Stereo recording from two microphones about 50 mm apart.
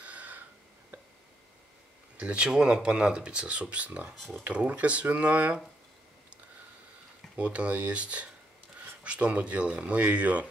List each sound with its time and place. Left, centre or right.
0.0 s a sound: right
2.1 s speech: right
4.1 s speech: centre
4.5 s speech: right
7.3 s speech: right